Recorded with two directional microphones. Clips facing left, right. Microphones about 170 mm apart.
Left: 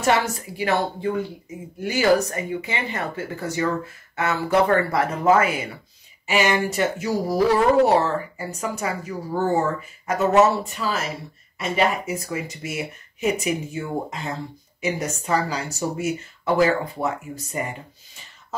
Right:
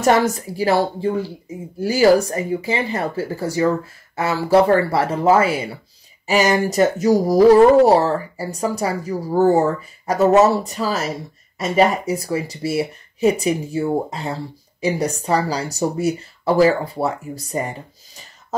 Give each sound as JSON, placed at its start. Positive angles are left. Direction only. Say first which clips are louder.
{"t": 0.0, "sound": "speech", "louder": "right 5 dB", "side_deg": -40}